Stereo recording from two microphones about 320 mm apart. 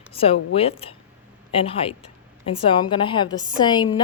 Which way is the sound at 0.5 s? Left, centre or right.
Centre.